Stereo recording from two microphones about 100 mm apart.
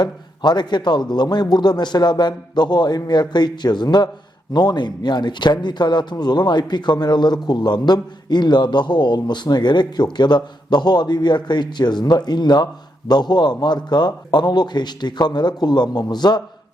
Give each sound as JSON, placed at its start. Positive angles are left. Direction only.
{"t": 0.0, "sound": "a man's voice", "side_deg": 45}